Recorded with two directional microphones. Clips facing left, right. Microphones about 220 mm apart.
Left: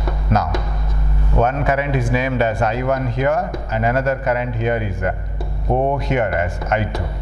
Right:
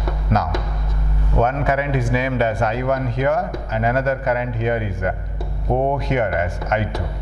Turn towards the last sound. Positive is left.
turn(degrees=15)  # may be behind; listen again after turning